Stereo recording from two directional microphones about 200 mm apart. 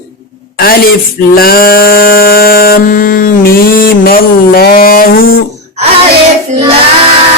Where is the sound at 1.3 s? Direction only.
50° left (ahead or behind).